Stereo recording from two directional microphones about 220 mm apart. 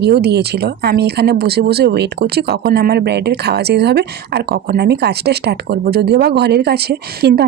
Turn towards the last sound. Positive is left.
turn(degrees=-45)  # may be behind; listen again after turning